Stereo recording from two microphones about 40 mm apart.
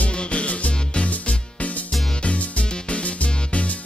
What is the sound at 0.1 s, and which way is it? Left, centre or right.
Music, left.